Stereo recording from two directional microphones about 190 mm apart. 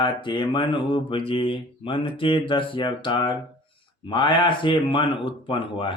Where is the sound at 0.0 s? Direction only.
25° left (ahead or behind).